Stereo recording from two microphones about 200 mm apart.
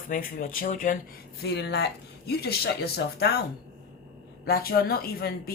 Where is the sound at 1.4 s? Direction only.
55° left (ahead or behind).